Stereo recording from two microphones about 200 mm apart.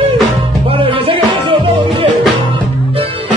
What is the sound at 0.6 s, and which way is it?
Music, 25° right (ahead or behind).